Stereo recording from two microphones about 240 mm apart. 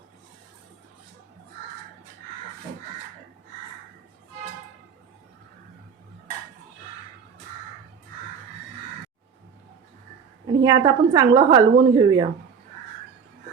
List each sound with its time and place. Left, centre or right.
10.4 s a woman's voice: centre